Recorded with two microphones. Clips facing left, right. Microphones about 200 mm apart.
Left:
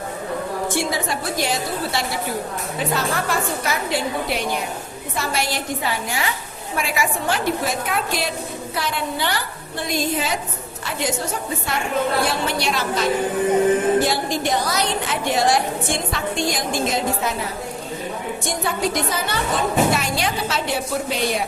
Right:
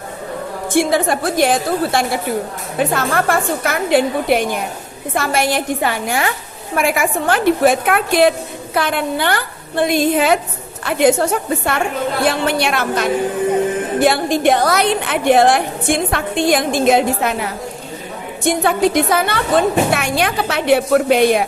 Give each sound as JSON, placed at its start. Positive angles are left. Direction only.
{"t": 0.8, "sound": "a woman's voice", "side_deg": -55}